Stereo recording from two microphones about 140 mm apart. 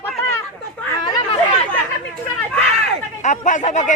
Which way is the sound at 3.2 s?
60° left (ahead or behind).